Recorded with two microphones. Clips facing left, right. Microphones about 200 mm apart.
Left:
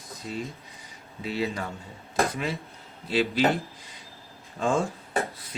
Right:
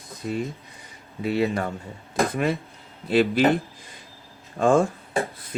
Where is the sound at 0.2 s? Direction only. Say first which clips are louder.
Right 6 dB; 55° right (ahead or behind).